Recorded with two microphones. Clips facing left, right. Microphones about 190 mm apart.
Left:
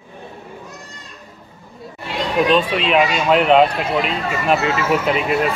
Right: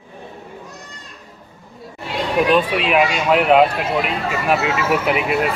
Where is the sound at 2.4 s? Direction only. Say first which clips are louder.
Even; 10° right (ahead or behind).